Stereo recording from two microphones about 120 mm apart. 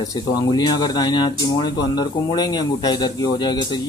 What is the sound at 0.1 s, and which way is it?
Speech, 35° left (ahead or behind).